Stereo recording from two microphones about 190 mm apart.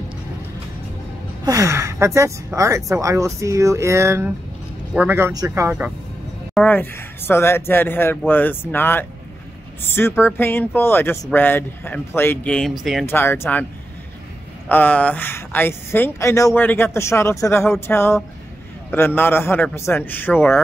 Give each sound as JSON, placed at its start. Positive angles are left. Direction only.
{"t": 1.4, "sound": "speech", "side_deg": -15}
{"t": 6.5, "sound": "speech", "side_deg": 10}
{"t": 13.0, "sound": "speech", "side_deg": 10}
{"t": 14.7, "sound": "speech", "side_deg": 10}